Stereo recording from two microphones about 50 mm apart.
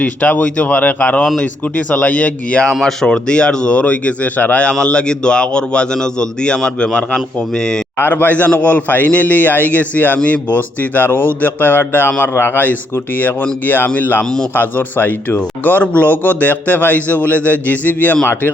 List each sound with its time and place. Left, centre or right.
0.0 s speech: left
2.8 s speech: centre; by 4.7 s left
4.7 s a man's voice: centre
8.1 s a man's voice: left
15.8 s speech: left
16.0 s speech: left